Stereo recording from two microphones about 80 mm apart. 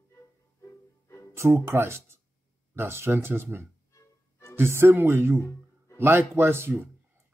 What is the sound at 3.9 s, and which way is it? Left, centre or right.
Music, left.